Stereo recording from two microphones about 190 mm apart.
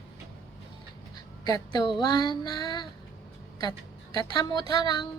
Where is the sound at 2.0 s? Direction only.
20° left (ahead or behind).